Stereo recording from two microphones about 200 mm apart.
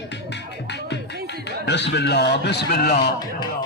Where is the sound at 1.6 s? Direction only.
60° left (ahead or behind).